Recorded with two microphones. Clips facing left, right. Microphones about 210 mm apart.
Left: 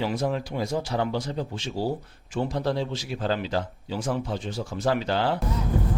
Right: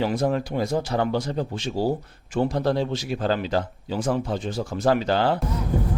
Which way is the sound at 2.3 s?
55° right (ahead or behind).